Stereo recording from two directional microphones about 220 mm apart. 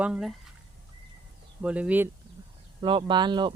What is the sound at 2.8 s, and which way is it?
Speech, 20° right (ahead or behind).